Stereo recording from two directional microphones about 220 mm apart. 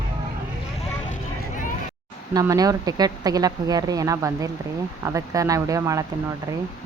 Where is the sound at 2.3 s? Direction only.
15° right (ahead or behind).